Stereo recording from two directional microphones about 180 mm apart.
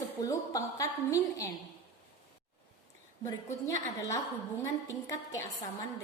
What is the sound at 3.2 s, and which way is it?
A woman's voice, 15° left (ahead or behind).